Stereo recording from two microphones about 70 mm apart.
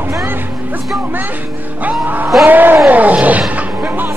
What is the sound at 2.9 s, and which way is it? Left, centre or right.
Roaring cats, right.